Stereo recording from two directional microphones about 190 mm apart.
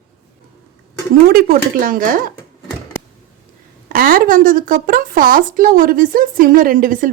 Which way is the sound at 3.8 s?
50° right (ahead or behind).